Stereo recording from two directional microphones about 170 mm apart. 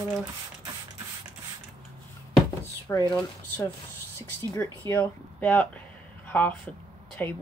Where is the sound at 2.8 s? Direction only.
20° left (ahead or behind).